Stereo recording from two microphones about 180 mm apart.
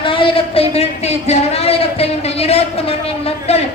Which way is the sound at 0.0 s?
30° left (ahead or behind).